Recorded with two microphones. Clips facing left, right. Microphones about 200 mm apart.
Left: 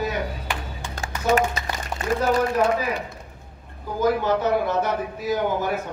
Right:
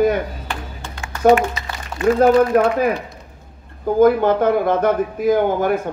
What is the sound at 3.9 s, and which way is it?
A man's voice, 55° right (ahead or behind).